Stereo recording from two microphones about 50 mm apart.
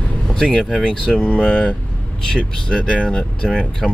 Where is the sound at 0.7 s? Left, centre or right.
Centre.